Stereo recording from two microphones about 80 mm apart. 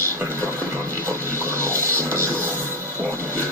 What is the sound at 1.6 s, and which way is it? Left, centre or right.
Music, right.